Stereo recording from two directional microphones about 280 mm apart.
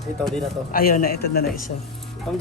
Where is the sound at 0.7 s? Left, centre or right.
Left.